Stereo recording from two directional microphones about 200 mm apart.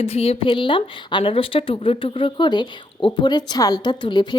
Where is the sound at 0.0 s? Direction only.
30° left (ahead or behind).